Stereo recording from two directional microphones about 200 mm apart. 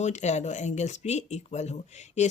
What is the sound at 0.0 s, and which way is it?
Speech, 35° left (ahead or behind).